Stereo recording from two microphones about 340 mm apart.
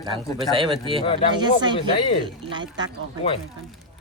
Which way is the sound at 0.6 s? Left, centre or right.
Centre.